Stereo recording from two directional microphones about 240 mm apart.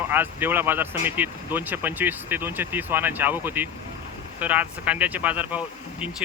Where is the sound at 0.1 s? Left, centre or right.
Centre.